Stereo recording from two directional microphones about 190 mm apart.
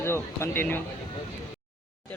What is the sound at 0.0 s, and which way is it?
Speech, 15° left (ahead or behind).